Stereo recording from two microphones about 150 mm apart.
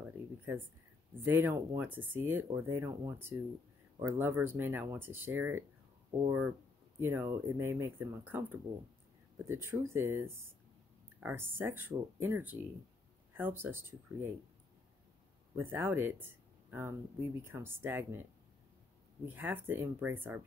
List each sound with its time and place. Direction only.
1.2 s speech: 15° right (ahead or behind)
7.0 s speech: 15° right (ahead or behind)
15.5 s speech: 15° right (ahead or behind)
19.2 s speech: 10° right (ahead or behind)